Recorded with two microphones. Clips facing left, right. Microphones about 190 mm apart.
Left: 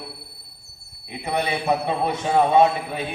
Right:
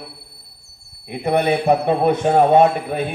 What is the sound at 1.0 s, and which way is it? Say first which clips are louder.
Speech: right 7 dB; 55° right (ahead or behind).